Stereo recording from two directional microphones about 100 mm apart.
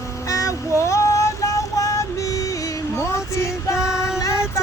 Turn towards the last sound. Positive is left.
turn(degrees=35)  # may be behind; listen again after turning